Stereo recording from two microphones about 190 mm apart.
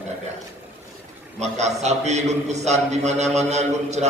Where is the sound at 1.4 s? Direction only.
35° right (ahead or behind).